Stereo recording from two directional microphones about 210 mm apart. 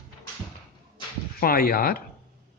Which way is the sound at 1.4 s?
45° left (ahead or behind).